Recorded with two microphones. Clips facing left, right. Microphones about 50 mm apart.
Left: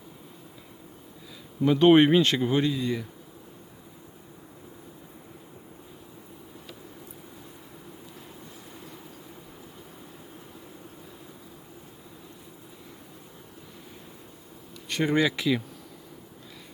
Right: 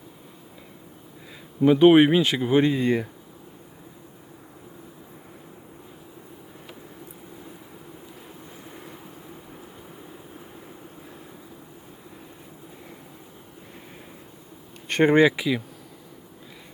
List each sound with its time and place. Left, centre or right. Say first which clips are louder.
1.6 s speech: right 3 dB; centre
2.5 s speech: right 6 dB; right
8.7 s train: right 3 dB; right
14.8 s speech: right 7 dB; right
15.3 s speech: right 1 dB; centre